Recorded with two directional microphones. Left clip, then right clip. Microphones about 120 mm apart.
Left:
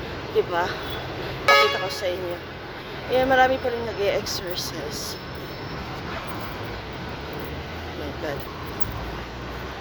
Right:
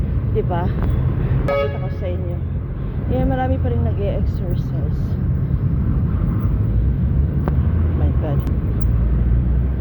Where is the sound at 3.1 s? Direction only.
45° left (ahead or behind).